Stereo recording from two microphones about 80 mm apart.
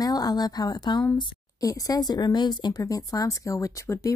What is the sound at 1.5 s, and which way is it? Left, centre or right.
A woman's voice, left.